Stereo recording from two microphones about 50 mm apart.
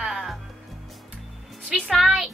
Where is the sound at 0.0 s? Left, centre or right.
Centre.